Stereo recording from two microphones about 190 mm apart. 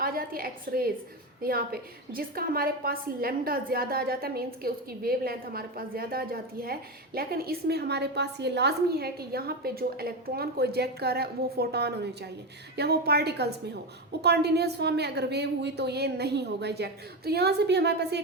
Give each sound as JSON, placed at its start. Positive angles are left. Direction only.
{"t": 0.0, "sound": "a woman's voice", "side_deg": -50}